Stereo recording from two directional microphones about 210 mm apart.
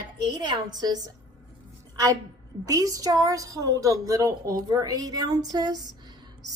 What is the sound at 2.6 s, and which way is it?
A woman's voice, 15° right (ahead or behind).